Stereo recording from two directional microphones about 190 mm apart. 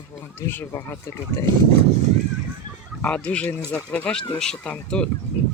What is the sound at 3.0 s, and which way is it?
Speech, 5° left (ahead or behind).